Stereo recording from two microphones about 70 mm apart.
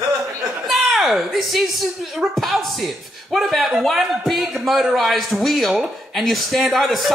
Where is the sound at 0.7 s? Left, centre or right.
Centre.